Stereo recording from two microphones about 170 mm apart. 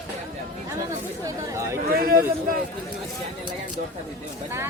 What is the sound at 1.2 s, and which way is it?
Speech, 15° right (ahead or behind).